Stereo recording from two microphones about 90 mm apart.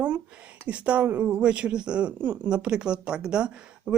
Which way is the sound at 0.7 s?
15° right (ahead or behind).